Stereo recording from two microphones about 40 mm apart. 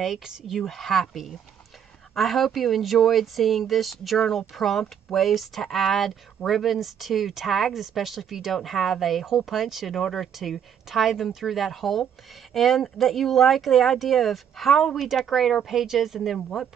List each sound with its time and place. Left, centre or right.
0.0 s speech: centre
2.1 s speech: centre